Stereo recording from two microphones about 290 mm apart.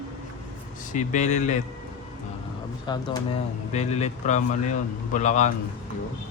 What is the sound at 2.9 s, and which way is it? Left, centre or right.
Speech, centre.